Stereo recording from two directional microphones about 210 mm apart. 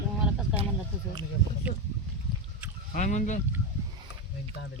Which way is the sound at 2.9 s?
35° left (ahead or behind).